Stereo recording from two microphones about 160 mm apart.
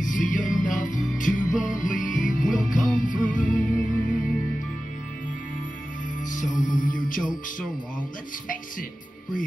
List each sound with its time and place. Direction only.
0.0 s music: 55° left (ahead or behind)
6.2 s music: 55° left (ahead or behind)